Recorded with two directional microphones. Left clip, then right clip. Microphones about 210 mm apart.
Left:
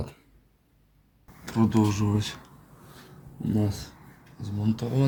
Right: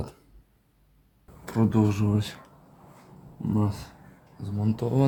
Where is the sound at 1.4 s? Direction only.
15° right (ahead or behind).